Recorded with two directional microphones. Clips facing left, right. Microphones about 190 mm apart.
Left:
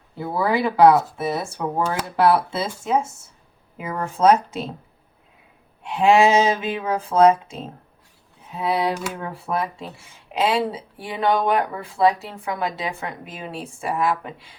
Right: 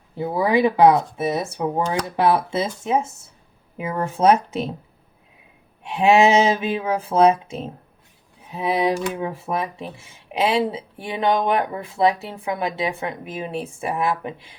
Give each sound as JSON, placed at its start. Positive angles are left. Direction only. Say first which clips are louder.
{"t": 0.2, "sound": "speech", "louder": "right 3 dB", "side_deg": -15}
{"t": 4.0, "sound": "speech", "louder": "even", "side_deg": -15}
{"t": 5.8, "sound": "speech", "louder": "even", "side_deg": -20}